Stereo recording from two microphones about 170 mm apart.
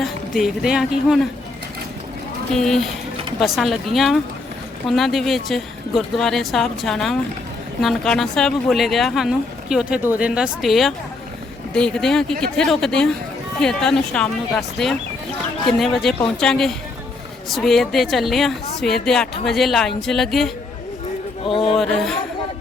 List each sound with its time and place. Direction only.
0.0 s speech: centre (ahead or behind)
2.5 s speech: 5° left (ahead or behind)
21.4 s speech: 30° left (ahead or behind)
21.8 s speech: centre (ahead or behind)